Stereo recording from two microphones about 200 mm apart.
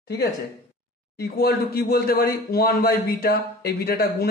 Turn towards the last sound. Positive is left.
turn(degrees=50)  # may be behind; listen again after turning